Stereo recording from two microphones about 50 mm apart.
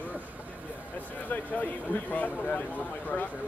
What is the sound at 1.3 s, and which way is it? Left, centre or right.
Speech, left.